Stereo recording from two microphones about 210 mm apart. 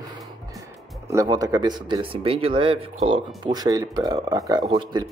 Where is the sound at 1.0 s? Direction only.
15° right (ahead or behind).